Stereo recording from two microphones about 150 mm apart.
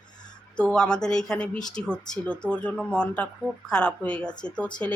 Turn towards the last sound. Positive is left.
turn(degrees=10)  # may be behind; listen again after turning